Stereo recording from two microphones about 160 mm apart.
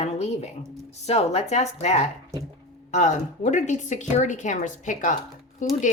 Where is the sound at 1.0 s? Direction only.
40° left (ahead or behind).